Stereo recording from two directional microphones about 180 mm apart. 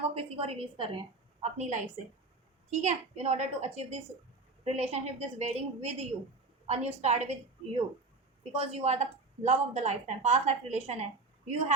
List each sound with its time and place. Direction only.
0.0 s a woman's voice: 35° right (ahead or behind)